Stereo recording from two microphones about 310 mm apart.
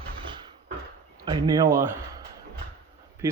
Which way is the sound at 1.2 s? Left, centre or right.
Centre.